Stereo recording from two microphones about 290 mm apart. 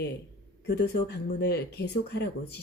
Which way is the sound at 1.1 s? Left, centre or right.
Left.